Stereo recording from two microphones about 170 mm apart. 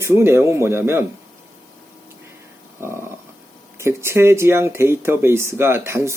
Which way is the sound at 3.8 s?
15° right (ahead or behind).